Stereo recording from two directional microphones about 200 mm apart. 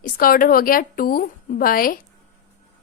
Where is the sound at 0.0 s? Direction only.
45° left (ahead or behind).